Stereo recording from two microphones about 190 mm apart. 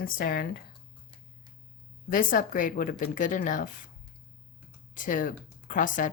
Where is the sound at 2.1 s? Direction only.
45° left (ahead or behind).